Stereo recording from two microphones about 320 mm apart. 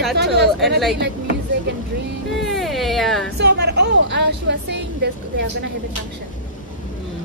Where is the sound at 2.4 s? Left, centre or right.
Centre.